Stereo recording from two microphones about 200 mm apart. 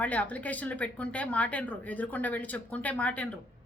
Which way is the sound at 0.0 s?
5° left (ahead or behind).